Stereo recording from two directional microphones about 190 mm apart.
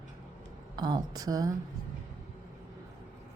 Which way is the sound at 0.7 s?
20° right (ahead or behind).